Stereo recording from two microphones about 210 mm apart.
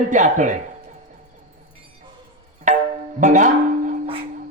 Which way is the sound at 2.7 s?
35° right (ahead or behind).